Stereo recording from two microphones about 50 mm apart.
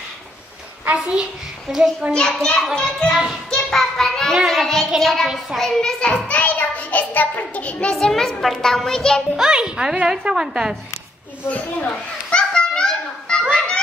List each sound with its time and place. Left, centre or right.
0.9 s a child's voice: centre
1.7 s a woman's voice: centre
2.1 s a child's voice: centre
3.4 s child singing: centre
5.6 s a child's voice: centre; by 7.9 s left
7.9 s child singing: centre
8.5 s a child's voice: centre
9.4 s a woman's voice: centre
11.4 s a child's voice: left
12.3 s children playing: centre
13.5 s music: left